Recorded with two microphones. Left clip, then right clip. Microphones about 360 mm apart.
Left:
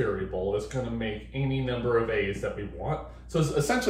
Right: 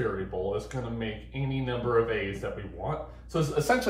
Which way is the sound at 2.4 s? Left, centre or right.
Centre.